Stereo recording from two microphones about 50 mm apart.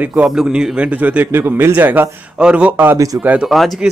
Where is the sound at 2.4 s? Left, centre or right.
Right.